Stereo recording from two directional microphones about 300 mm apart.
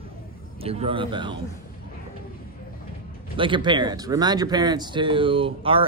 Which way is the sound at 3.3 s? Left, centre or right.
Centre.